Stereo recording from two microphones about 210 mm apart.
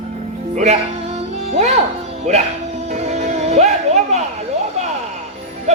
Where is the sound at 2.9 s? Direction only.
35° right (ahead or behind).